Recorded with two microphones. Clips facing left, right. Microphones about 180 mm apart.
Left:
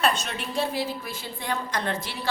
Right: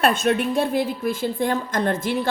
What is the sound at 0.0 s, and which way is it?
A woman's voice, 55° right (ahead or behind).